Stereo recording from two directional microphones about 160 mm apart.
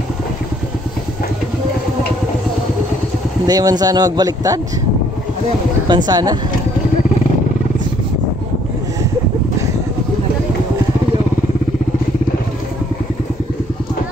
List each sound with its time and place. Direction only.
3.4 s speech: 25° right (ahead or behind)
5.9 s speech: 25° right (ahead or behind)